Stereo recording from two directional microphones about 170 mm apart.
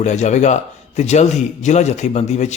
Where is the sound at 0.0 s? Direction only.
45° left (ahead or behind).